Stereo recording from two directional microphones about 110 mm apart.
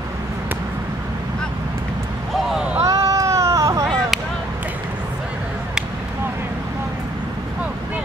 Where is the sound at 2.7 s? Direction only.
30° right (ahead or behind).